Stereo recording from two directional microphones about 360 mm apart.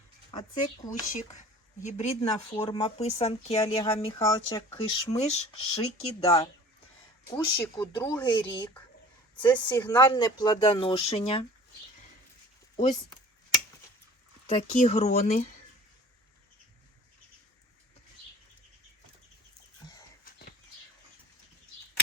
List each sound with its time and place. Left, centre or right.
0.3 s speech: centre
12.7 s speech: centre
14.5 s speech: centre